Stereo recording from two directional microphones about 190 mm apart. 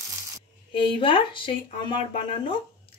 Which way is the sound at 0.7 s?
30° left (ahead or behind).